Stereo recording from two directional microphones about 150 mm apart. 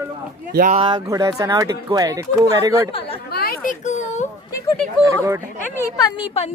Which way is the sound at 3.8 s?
50° left (ahead or behind).